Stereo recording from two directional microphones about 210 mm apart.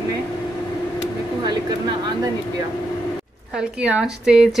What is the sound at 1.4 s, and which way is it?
Speech, 20° right (ahead or behind).